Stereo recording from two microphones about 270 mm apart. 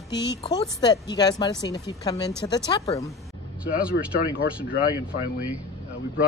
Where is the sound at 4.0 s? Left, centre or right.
Left.